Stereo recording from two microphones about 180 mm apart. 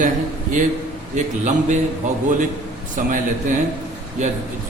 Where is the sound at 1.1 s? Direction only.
40° right (ahead or behind).